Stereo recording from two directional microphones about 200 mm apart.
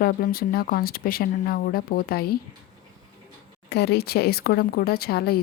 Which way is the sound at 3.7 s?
55° left (ahead or behind).